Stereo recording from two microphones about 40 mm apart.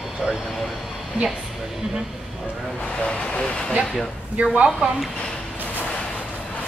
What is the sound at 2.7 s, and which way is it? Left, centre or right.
Speech, left.